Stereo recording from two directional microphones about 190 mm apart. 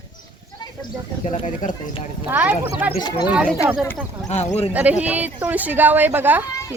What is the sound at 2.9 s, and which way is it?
Speech, 20° left (ahead or behind).